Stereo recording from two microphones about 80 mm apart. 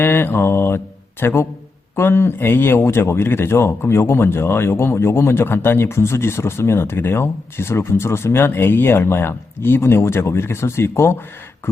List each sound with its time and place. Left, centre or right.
0.0 s mantra: left
1.2 s speech: left